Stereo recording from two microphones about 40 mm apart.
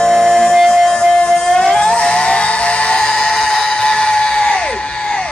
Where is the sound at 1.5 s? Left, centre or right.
Centre.